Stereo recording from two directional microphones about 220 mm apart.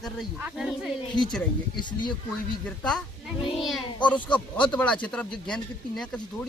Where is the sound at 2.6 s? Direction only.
5° left (ahead or behind).